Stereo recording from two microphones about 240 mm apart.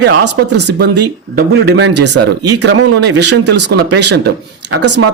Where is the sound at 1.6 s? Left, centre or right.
Right.